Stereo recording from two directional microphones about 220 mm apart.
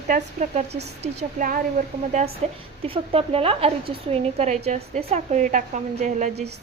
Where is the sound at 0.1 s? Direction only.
30° right (ahead or behind).